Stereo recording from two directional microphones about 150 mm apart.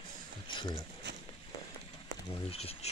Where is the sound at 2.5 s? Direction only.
40° left (ahead or behind).